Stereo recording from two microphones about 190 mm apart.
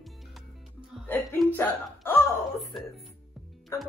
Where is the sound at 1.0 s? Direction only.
10° left (ahead or behind).